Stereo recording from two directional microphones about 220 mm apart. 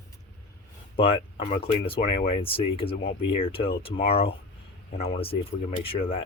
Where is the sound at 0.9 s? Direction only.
25° left (ahead or behind).